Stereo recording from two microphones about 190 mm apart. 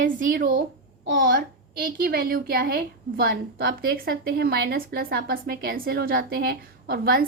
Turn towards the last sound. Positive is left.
turn(degrees=-55)  # may be behind; listen again after turning